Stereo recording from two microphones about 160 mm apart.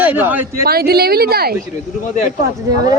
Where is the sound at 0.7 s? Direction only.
75° right (ahead or behind).